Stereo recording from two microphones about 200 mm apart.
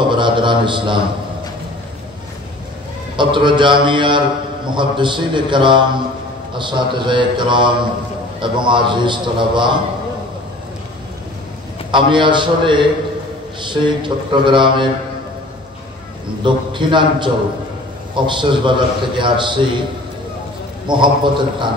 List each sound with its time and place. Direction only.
0.1 s a sound: 25° right (ahead or behind)
3.2 s a man's voice: 25° right (ahead or behind)
11.9 s a man's voice: 25° right (ahead or behind)
16.4 s a man's voice: 25° right (ahead or behind)
20.8 s a man's voice: 25° right (ahead or behind)